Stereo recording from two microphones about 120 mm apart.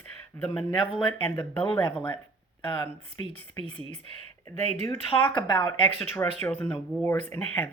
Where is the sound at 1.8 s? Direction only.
35° left (ahead or behind).